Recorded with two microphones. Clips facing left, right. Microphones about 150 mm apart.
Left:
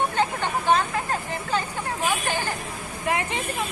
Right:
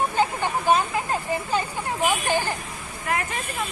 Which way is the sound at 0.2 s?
5° right (ahead or behind).